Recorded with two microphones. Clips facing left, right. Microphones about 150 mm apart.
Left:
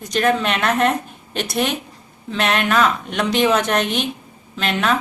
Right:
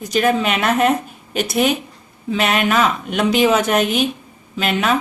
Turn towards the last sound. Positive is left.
turn(degrees=-5)  # may be behind; listen again after turning